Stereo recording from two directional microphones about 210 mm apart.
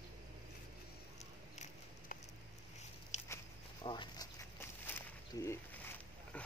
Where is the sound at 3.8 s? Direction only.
20° left (ahead or behind).